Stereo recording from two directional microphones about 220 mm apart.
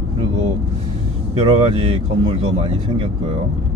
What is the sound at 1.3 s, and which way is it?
Speech, 25° right (ahead or behind).